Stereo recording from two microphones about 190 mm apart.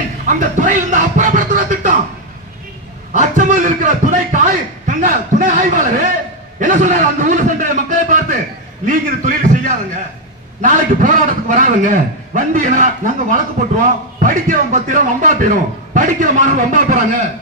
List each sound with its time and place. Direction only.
0.3 s music: 45° right (ahead or behind)
3.1 s a sound: 40° right (ahead or behind)
4.8 s a man's voice: 45° right (ahead or behind)